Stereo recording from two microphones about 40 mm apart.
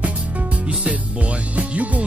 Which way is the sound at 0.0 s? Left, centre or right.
Right.